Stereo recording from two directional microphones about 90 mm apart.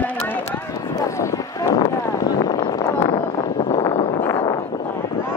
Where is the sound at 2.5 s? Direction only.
55° left (ahead or behind).